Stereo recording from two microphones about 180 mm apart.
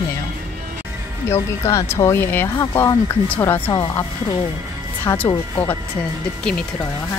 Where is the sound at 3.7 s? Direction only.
25° left (ahead or behind).